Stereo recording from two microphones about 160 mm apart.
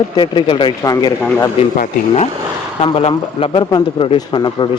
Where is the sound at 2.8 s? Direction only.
35° left (ahead or behind).